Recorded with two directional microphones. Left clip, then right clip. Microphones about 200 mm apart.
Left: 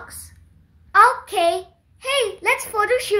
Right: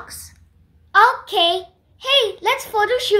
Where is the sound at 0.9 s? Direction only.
5° right (ahead or behind).